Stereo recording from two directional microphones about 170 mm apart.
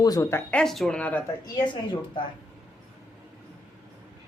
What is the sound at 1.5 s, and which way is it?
Speech, 25° left (ahead or behind).